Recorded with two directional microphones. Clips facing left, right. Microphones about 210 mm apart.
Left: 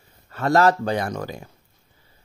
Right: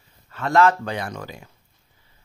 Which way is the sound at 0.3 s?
40° left (ahead or behind).